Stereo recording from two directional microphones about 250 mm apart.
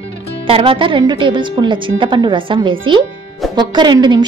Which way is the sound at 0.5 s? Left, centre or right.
Right.